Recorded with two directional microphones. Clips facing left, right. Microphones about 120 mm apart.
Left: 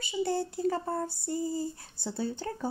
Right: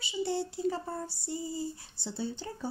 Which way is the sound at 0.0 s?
50° left (ahead or behind).